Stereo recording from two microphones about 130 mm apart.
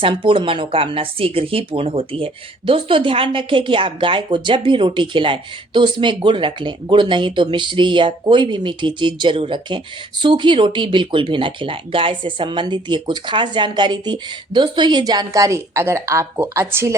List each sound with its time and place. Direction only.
0.0 s speech: 40° right (ahead or behind); by 16.9 s 20° right (ahead or behind)